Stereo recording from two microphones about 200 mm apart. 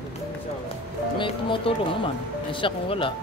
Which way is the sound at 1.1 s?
25° left (ahead or behind).